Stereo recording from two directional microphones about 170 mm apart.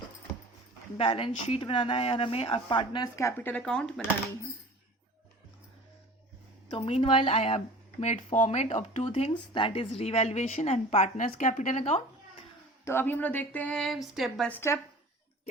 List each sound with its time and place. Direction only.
0.9 s speech: 35° left (ahead or behind); by 4.0 s 5° left (ahead or behind)
6.7 s speech: 35° left (ahead or behind)
12.8 s speech: 15° left (ahead or behind)